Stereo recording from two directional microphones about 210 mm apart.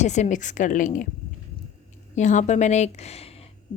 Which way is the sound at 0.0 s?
35° left (ahead or behind).